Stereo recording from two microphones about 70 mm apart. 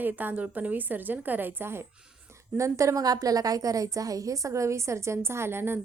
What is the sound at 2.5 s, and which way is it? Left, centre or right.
A woman's voice, right.